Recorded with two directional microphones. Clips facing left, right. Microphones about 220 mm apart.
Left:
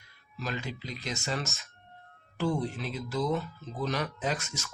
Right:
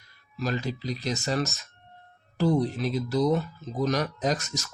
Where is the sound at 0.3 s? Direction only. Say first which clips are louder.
Right 6 dB; 35° right (ahead or behind).